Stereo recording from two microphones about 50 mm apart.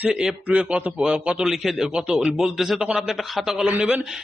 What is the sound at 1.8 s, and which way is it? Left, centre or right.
Speech, centre.